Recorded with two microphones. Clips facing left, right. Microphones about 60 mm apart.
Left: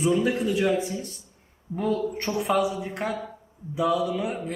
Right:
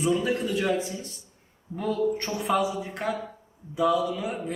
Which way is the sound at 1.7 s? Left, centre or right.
Left.